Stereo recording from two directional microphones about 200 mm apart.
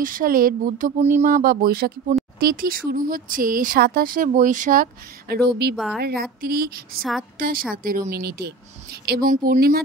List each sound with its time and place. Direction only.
0.0 s speech: 45° right (ahead or behind)
5.3 s speech: 55° right (ahead or behind)
7.0 s a woman's voice: centre (ahead or behind)
7.3 s a woman's voice: 45° right (ahead or behind)